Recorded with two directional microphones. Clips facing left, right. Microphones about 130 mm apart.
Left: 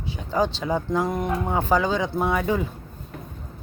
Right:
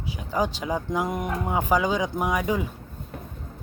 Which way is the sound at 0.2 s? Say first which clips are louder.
Left 3 dB; 10° right (ahead or behind).